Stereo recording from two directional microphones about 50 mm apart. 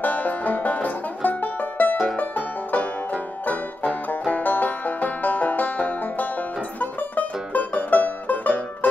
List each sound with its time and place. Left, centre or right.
0.0 s music: left
2.1 s banjo: left
7.5 s music: left